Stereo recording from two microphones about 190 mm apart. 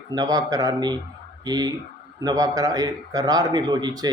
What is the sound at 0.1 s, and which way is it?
Speech, 20° right (ahead or behind).